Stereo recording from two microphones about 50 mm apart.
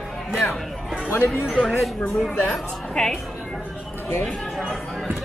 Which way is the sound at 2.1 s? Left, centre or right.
Centre.